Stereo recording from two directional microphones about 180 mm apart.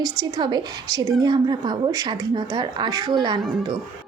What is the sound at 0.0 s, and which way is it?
A woman's voice, 20° right (ahead or behind).